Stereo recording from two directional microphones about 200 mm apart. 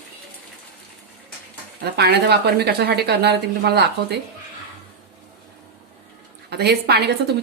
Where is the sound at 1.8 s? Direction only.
55° right (ahead or behind).